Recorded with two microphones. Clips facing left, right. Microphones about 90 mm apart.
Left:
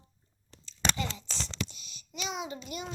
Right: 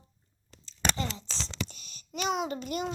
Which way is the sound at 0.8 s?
30° right (ahead or behind).